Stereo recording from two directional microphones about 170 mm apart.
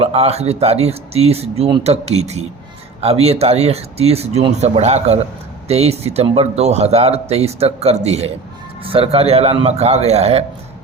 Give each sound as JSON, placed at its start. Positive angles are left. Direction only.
{"t": 0.0, "sound": "a man's voice", "side_deg": -35}